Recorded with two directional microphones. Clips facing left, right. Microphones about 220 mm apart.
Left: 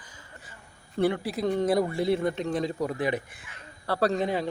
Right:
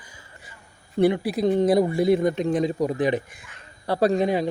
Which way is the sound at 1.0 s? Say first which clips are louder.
Right 5 dB; 15° right (ahead or behind).